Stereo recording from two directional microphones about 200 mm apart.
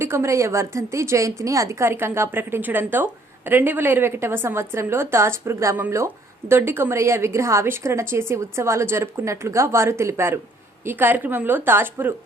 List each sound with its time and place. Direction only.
0.0 s a woman's voice: 15° right (ahead or behind)